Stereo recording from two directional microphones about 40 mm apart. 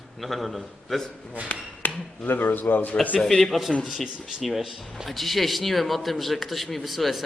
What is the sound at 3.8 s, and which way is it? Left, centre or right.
Speech, centre.